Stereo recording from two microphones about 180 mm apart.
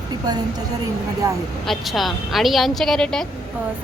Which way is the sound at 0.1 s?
25° right (ahead or behind).